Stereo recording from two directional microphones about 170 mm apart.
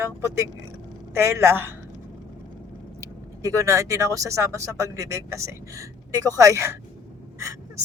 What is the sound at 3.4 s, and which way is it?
Speech, 20° right (ahead or behind).